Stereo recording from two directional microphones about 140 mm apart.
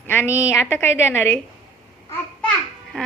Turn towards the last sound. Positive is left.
turn(degrees=5)  # may be behind; listen again after turning